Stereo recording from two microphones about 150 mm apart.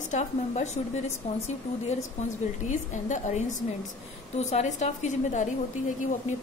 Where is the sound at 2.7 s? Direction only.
55° left (ahead or behind).